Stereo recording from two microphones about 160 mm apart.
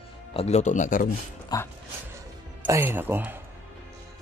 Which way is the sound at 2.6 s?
15° right (ahead or behind).